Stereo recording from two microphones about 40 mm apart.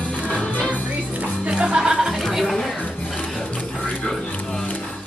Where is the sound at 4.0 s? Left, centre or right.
Centre.